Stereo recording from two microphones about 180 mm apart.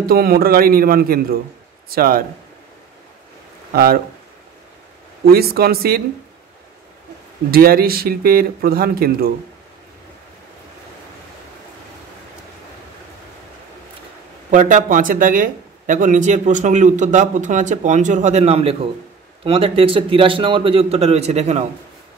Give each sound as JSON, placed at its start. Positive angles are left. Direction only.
{"t": 0.0, "sound": "speech", "side_deg": -55}
{"t": 3.7, "sound": "speech", "side_deg": -60}
{"t": 5.2, "sound": "speech", "side_deg": -60}
{"t": 7.5, "sound": "speech", "side_deg": -55}
{"t": 14.5, "sound": "a man's voice", "side_deg": -45}